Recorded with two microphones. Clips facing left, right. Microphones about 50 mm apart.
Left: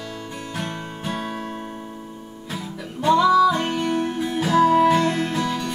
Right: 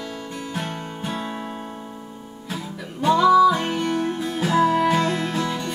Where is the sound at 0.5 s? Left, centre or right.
Centre.